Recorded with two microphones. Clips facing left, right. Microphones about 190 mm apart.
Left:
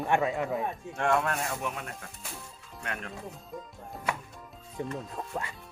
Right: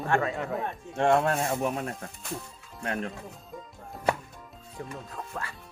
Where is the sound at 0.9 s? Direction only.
30° right (ahead or behind).